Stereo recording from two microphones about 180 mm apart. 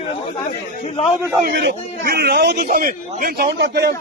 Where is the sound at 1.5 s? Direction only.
70° right (ahead or behind).